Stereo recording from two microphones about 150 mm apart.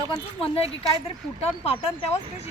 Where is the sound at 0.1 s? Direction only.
40° left (ahead or behind).